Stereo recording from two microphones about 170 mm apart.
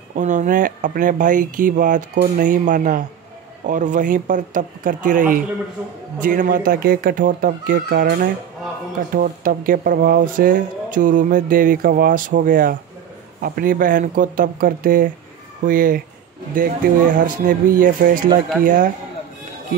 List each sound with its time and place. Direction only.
0.1 s speech: 45° right (ahead or behind)